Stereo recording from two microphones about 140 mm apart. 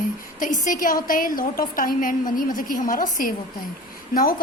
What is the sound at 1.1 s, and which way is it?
A woman's voice, 80° left.